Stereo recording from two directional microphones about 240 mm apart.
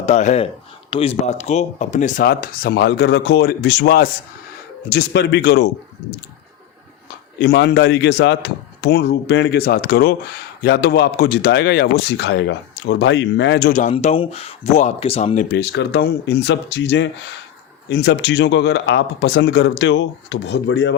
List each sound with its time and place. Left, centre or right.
0.0 s speech: left
7.3 s speech: left
13.7 s speech: left
15.4 s speech: left